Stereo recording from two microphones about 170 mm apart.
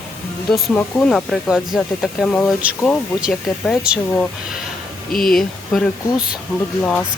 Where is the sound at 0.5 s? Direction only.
5° left (ahead or behind).